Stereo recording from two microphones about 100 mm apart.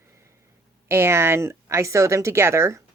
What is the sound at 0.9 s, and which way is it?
Speech, 25° right (ahead or behind).